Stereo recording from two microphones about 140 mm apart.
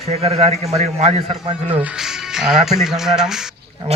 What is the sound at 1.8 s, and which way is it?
Speech, 5° right (ahead or behind).